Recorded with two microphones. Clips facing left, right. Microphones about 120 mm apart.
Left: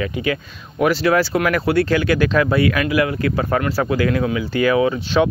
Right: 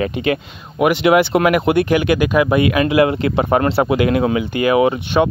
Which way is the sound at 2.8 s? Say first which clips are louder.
Right 4 dB; 25° right (ahead or behind).